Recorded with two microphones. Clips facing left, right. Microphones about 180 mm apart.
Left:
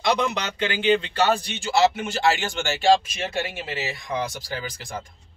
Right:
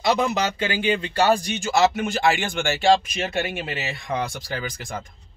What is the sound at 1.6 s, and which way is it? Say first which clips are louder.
Speech: right 1 dB; 45° right (ahead or behind).